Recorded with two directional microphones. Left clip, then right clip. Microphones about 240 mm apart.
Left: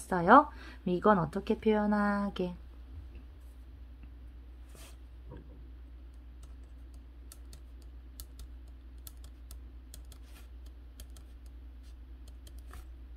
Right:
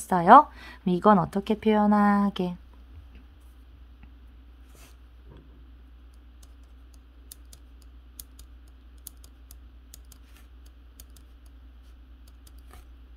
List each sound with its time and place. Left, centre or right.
0.1 s speech: right